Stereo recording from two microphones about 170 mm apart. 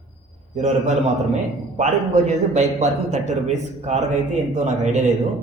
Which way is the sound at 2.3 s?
45° right (ahead or behind).